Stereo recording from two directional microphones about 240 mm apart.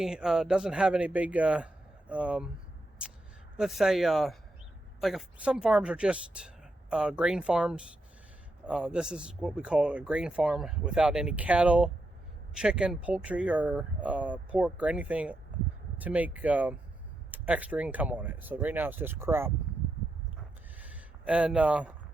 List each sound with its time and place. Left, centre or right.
0.0 s speech: centre
3.6 s speech: centre
20.7 s a sound: centre